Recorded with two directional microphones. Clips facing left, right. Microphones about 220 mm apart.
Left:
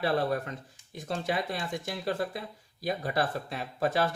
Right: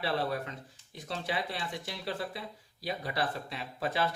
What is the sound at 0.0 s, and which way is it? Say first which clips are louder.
Speech: left 4 dB; 45° left (ahead or behind).